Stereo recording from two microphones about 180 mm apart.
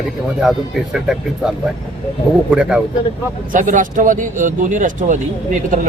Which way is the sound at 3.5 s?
45° right (ahead or behind).